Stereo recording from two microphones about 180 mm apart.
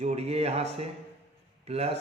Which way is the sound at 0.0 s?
35° right (ahead or behind).